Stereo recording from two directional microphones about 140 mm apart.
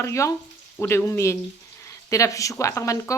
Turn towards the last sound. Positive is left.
turn(degrees=20)  # may be behind; listen again after turning